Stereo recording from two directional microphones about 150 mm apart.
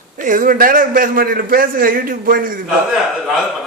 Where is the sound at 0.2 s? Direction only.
65° right (ahead or behind).